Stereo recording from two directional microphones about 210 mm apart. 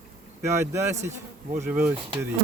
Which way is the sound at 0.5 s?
15° right (ahead or behind).